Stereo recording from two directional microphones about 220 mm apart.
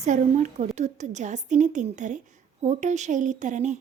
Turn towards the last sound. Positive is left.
turn(degrees=-35)  # may be behind; listen again after turning